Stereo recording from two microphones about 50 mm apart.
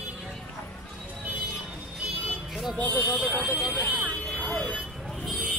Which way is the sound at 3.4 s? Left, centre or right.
Right.